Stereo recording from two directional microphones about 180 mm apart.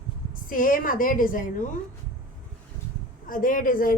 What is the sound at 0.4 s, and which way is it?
A woman's voice, 50° left (ahead or behind).